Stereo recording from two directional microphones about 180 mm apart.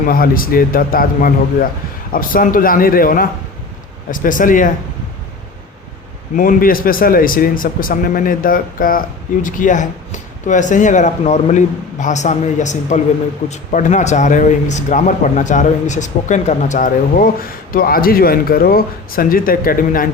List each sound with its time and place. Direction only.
0.1 s speech: 50° left (ahead or behind)
6.3 s speech: 50° left (ahead or behind)